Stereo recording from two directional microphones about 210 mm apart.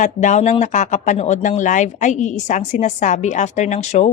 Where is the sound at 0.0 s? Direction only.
35° left (ahead or behind).